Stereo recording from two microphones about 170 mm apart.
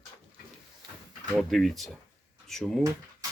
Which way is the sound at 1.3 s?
Centre (ahead or behind).